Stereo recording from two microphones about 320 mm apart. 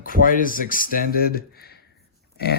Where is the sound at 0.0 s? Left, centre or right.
Left.